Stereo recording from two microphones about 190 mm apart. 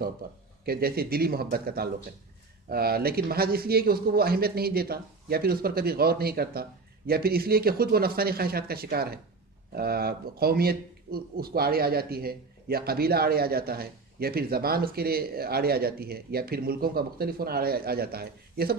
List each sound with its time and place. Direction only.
0.2 s speech: 50° right (ahead or behind)